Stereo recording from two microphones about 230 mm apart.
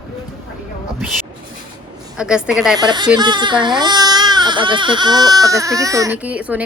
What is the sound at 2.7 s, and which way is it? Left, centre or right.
Speech, centre.